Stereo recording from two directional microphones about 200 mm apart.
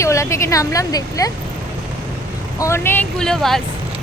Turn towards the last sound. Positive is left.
turn(degrees=0)  # may be behind; listen again after turning